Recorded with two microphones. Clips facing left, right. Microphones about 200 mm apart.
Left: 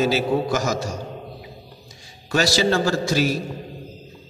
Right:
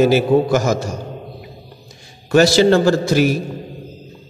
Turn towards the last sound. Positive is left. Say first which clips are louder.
# right 6 dB
turn(degrees=-55)  # may be behind; listen again after turning